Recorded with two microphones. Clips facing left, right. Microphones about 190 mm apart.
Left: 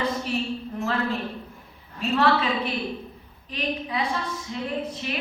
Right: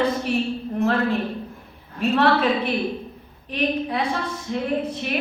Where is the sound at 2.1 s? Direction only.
60° right (ahead or behind).